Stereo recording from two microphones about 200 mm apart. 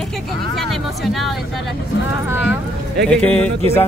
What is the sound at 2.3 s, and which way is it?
Speech, 10° right (ahead or behind).